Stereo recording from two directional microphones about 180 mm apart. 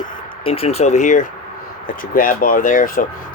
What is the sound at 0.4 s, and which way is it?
Speech, 35° left (ahead or behind).